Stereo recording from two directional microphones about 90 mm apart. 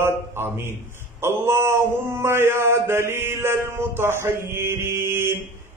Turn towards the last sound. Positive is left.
turn(degrees=-25)  # may be behind; listen again after turning